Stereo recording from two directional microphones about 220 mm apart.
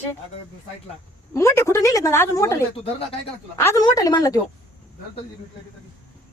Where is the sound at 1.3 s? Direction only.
15° left (ahead or behind).